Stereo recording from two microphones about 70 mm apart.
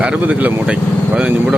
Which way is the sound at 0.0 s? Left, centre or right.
Centre.